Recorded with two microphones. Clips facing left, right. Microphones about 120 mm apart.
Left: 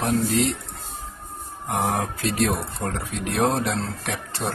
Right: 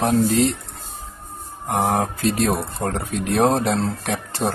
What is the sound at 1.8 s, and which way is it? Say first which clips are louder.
Speech: right 4 dB; 40° right (ahead or behind).